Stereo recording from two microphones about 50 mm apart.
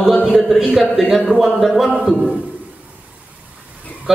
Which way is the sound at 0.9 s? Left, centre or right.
Centre.